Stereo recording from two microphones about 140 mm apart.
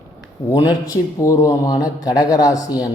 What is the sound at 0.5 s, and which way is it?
Speech, 25° left (ahead or behind).